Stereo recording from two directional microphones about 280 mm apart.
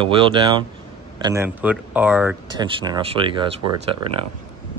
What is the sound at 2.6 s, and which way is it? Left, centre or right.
Speech, centre.